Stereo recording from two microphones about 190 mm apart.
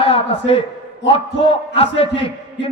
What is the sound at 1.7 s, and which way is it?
Speech, 30° left (ahead or behind).